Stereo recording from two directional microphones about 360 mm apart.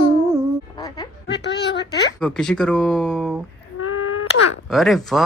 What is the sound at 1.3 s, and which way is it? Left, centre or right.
Speech, left.